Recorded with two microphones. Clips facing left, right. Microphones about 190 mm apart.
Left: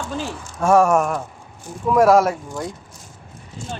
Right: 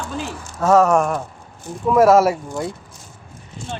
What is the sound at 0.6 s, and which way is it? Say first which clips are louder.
A man's voice: right 1 dB; 10° left (ahead or behind).